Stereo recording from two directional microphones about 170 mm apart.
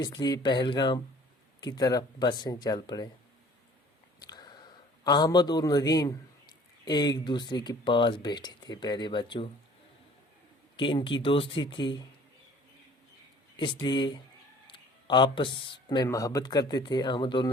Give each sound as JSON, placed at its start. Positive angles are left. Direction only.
{"t": 0.0, "sound": "speech", "side_deg": 25}
{"t": 4.2, "sound": "a sound", "side_deg": 25}
{"t": 6.8, "sound": "speech", "side_deg": 25}
{"t": 10.8, "sound": "speech", "side_deg": 30}
{"t": 13.8, "sound": "speech", "side_deg": 25}